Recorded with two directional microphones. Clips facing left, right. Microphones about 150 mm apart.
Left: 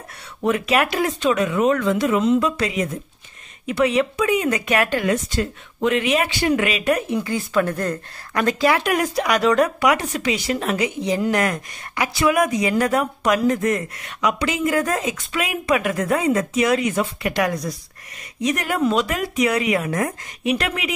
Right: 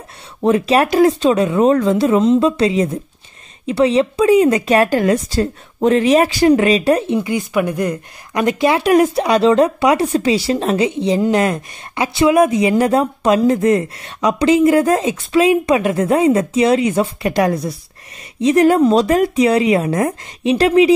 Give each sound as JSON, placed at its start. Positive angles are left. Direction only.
{"t": 0.4, "sound": "speech", "side_deg": -30}